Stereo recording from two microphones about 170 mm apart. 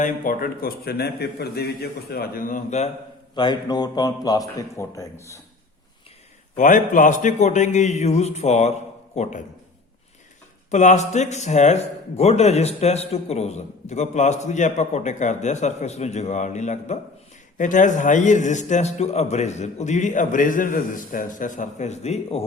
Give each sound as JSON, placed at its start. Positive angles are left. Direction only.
{"t": 0.0, "sound": "a man's voice", "side_deg": 55}
{"t": 3.3, "sound": "a man's voice", "side_deg": 25}
{"t": 6.6, "sound": "a man's voice", "side_deg": 50}
{"t": 10.7, "sound": "a man's voice", "side_deg": 45}